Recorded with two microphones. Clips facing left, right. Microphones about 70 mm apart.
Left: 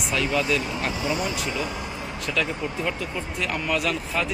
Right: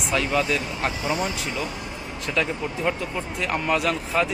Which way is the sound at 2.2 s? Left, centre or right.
Right.